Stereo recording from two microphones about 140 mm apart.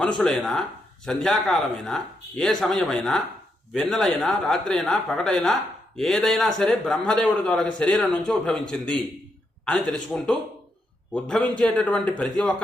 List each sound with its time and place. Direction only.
0.2 s a man's voice: 5° left (ahead or behind)